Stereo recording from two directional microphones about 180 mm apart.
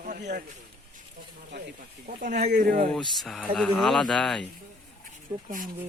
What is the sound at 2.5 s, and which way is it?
Speech, 55° right (ahead or behind).